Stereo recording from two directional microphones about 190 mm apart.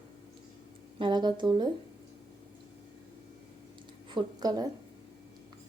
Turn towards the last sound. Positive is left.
turn(degrees=-20)  # may be behind; listen again after turning